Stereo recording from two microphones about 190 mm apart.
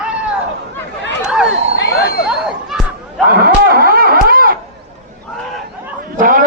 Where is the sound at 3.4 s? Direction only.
50° right (ahead or behind).